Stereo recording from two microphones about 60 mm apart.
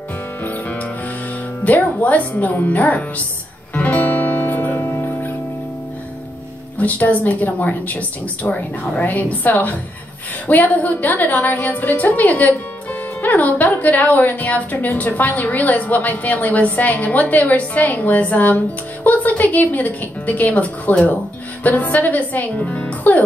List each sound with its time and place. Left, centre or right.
0.4 s music: left
1.6 s a woman's voice: left
3.7 s music: left
4.7 s music: left
6.8 s a woman's voice: left